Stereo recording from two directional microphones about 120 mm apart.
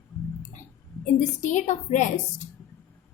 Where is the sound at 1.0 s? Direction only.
90° left.